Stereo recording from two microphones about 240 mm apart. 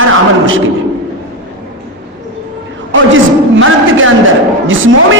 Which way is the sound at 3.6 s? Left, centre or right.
Right.